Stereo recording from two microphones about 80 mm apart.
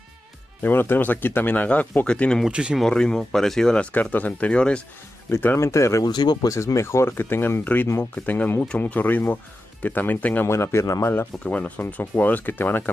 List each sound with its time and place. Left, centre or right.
0.6 s speech: left
2.4 s speech: centre
2.8 s speech: centre
5.3 s speech: left
6.0 s speech: left
6.5 s speech: left
10.5 s speech: left
11.3 s speech: centre